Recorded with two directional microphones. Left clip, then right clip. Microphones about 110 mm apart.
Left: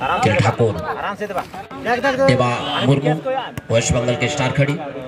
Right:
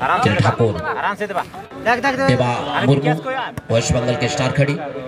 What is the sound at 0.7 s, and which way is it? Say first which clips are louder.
Speech: right 3 dB; 60° right (ahead or behind).